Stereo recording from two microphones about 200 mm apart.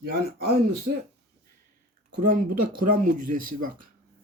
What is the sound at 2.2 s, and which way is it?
Speech, 45° right (ahead or behind).